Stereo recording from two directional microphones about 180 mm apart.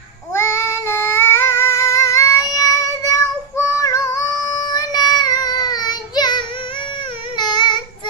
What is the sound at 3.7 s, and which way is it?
Music, 15° left (ahead or behind).